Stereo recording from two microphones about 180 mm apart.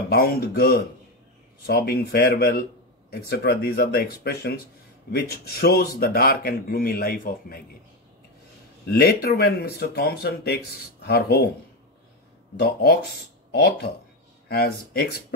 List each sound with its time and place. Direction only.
0.1 s speech: 60° left (ahead or behind)
8.8 s speech: 60° left (ahead or behind)
12.5 s speech: 60° left (ahead or behind)
14.5 s speech: 60° left (ahead or behind)